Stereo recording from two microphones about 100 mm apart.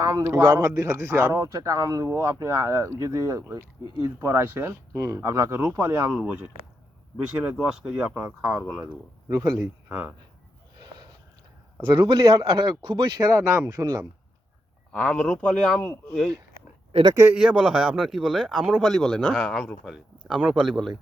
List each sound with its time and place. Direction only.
0.0 s a man's voice: 35° right (ahead or behind); by 6.5 s 15° right (ahead or behind)
7.6 s a man's voice: 5° right (ahead or behind)
9.3 s speech: 35° right (ahead or behind)
9.6 s speech: 15° right (ahead or behind)
10.8 s a sound: 45° right (ahead or behind)
11.8 s a man's voice: 55° right (ahead or behind)
12.4 s speech: 45° right (ahead or behind)
14.9 s speech: 10° left (ahead or behind)
16.9 s speech: 90° right
17.3 s a man's voice: 10° right (ahead or behind)